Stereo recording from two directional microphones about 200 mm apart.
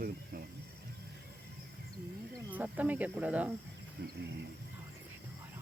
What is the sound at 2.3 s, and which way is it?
Speech, 10° right (ahead or behind).